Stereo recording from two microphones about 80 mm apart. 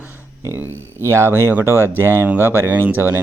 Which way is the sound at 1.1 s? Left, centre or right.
Right.